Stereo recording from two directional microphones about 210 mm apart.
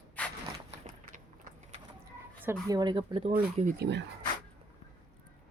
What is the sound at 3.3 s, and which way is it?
Speech, 40° right (ahead or behind).